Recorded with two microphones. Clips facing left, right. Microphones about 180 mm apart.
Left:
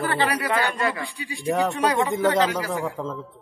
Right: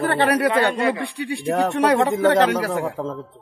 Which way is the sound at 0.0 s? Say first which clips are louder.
Right 5 dB; 65° right (ahead or behind).